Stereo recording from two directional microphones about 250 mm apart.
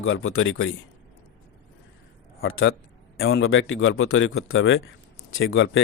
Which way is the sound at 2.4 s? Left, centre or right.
Left.